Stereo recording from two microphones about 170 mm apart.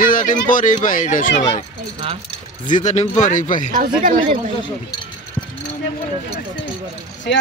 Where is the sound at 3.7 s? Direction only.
55° right (ahead or behind).